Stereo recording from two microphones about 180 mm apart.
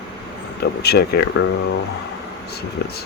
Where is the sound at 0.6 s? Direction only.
65° left (ahead or behind).